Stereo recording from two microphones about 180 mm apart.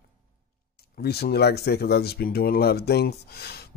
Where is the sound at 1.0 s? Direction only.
60° left (ahead or behind).